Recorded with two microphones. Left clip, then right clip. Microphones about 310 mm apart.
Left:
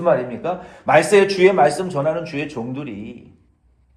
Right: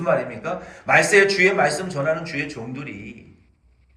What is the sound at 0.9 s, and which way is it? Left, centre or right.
Speech, left.